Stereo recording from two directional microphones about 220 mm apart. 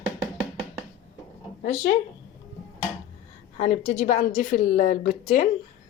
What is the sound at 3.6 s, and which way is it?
A woman's voice, 30° left (ahead or behind).